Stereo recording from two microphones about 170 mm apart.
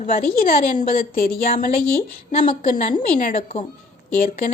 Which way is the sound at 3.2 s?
50° left (ahead or behind).